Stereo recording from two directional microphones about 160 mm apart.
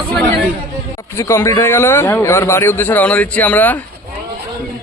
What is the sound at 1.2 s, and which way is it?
A man's voice, 20° left (ahead or behind).